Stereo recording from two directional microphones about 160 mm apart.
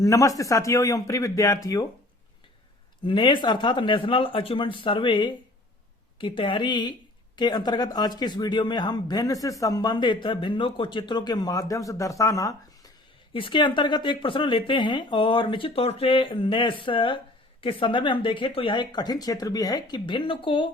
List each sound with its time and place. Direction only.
0.0 s speech: 20° left (ahead or behind)
3.0 s speech: 30° left (ahead or behind)
13.3 s speech: 30° left (ahead or behind)